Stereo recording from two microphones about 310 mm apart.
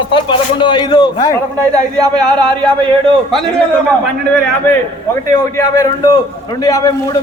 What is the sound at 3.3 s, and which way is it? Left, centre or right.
Speech, centre.